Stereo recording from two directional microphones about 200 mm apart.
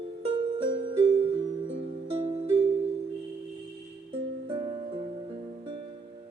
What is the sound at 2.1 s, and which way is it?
Music, 30° right (ahead or behind).